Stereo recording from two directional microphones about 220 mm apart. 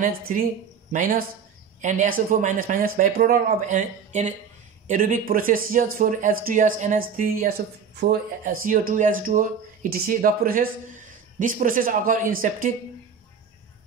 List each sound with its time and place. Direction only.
0.0 s speech: 40° right (ahead or behind)